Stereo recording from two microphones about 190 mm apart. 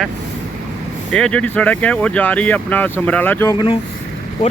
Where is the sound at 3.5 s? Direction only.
25° left (ahead or behind).